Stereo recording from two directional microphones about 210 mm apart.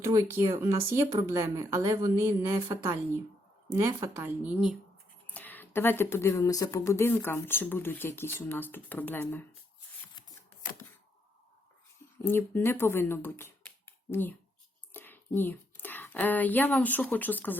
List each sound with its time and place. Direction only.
0.0 s a woman's voice: 15° right (ahead or behind)
5.3 s speech: 10° left (ahead or behind)
12.2 s speech: 10° left (ahead or behind)